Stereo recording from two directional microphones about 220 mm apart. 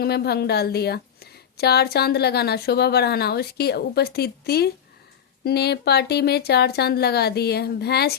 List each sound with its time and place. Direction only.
0.0 s a woman's voice: 45° left (ahead or behind)